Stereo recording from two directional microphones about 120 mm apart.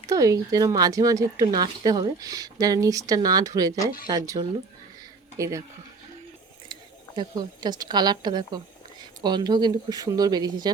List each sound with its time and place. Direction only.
0.1 s speech: 30° right (ahead or behind)
7.2 s speech: 35° right (ahead or behind)